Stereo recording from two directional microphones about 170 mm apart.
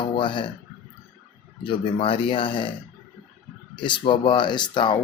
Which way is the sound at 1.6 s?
30° left (ahead or behind).